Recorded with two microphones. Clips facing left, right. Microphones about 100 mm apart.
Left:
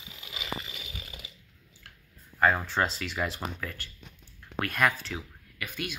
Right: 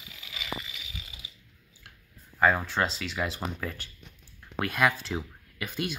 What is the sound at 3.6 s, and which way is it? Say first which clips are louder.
Speech: right 2 dB; 15° right (ahead or behind).